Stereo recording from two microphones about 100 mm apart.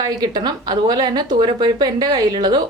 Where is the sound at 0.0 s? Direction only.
40° right (ahead or behind).